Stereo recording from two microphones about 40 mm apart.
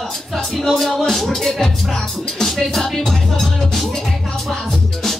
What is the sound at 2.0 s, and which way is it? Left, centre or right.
Music, centre.